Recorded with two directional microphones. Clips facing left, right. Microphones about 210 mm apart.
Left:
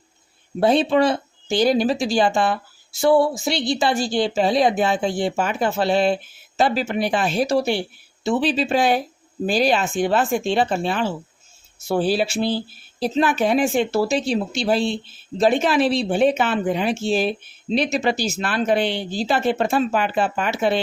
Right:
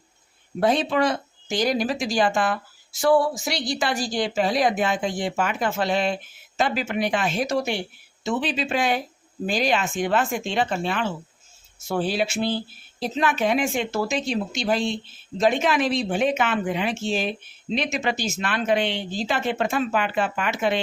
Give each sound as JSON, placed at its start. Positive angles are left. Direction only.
{"t": 0.6, "sound": "speech", "side_deg": 30}